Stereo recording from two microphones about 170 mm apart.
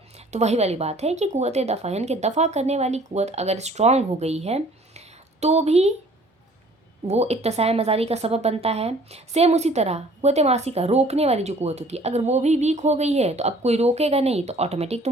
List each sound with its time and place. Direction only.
0.3 s speech: 40° right (ahead or behind)
7.1 s speech: 40° right (ahead or behind)